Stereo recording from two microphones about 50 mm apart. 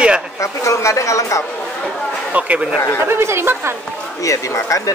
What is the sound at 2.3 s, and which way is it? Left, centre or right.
Speech, right.